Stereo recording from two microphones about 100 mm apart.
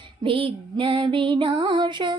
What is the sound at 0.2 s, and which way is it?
Female singing, 60° right (ahead or behind).